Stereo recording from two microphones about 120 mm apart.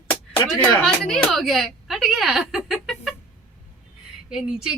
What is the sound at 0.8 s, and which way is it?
Speech, 5° left (ahead or behind).